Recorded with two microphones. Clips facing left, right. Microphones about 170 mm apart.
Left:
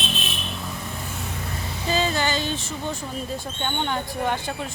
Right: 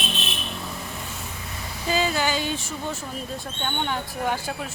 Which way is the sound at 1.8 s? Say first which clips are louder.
Even; 5° right (ahead or behind).